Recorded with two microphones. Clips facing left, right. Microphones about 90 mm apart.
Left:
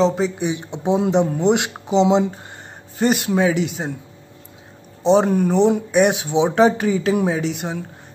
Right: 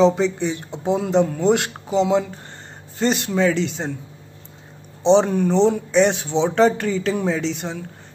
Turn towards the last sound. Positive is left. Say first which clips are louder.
# left 2 dB
turn(degrees=10)  # may be behind; listen again after turning